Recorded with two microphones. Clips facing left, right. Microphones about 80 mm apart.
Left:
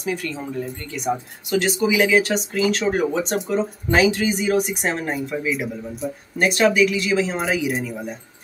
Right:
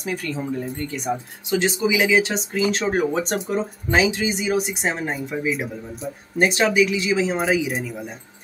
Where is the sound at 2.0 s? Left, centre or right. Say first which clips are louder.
Left 1 dB; centre.